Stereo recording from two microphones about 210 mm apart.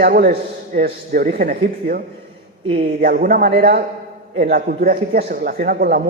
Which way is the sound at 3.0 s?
45° right (ahead or behind).